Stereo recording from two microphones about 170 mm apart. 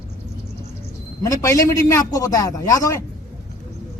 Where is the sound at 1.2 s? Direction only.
20° left (ahead or behind).